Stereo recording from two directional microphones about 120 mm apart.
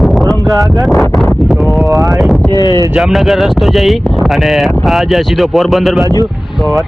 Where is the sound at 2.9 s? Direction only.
Centre (ahead or behind).